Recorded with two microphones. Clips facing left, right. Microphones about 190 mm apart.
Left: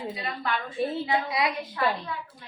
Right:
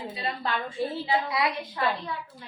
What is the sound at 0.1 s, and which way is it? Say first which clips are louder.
Speech: right 1 dB; 25° right (ahead or behind).